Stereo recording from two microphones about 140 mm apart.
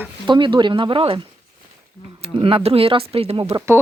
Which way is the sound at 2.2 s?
45° right (ahead or behind).